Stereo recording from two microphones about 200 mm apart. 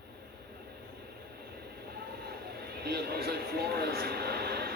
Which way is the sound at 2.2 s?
50° right (ahead or behind).